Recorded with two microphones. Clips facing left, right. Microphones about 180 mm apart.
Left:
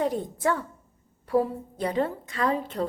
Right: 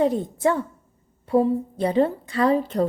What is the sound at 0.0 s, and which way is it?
A woman's voice, 25° right (ahead or behind).